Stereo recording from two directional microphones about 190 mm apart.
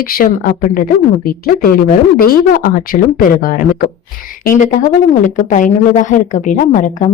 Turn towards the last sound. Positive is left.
turn(degrees=45)  # may be behind; listen again after turning